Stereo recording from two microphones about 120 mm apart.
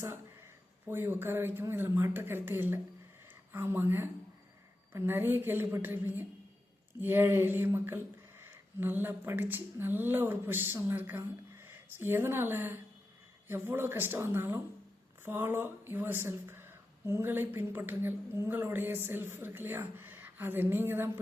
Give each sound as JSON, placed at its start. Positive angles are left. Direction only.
{"t": 0.9, "sound": "speech", "side_deg": -20}